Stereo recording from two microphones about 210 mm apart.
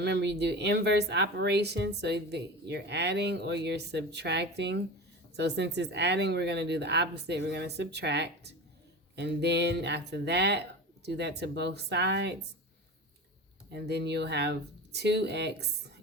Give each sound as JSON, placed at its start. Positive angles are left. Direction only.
{"t": 0.0, "sound": "speech", "side_deg": -55}
{"t": 13.7, "sound": "speech", "side_deg": -55}